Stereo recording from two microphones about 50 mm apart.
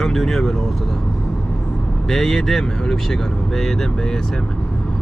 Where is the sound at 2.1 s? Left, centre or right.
Centre.